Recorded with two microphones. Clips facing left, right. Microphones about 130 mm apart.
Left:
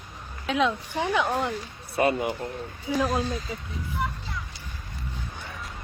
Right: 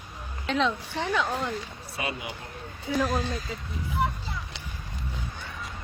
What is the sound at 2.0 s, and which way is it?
Speech, 50° left (ahead or behind).